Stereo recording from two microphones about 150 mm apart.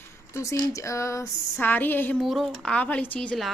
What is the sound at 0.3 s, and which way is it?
A woman's voice, 20° left (ahead or behind).